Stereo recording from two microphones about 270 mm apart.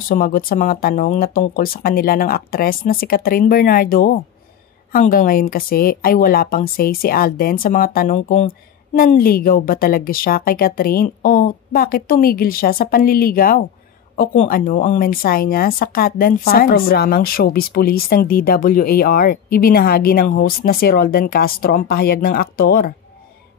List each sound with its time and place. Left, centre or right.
0.1 s speech: left